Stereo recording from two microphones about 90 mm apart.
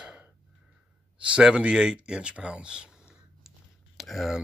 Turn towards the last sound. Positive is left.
turn(degrees=0)  # may be behind; listen again after turning